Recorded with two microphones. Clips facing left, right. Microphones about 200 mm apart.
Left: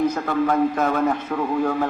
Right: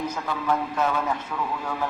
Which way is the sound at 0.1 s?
55° left (ahead or behind).